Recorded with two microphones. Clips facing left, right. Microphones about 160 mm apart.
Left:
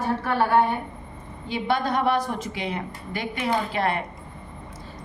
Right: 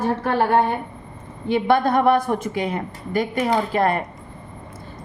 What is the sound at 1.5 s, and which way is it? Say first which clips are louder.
A woman's voice: right 7 dB; 55° right (ahead or behind).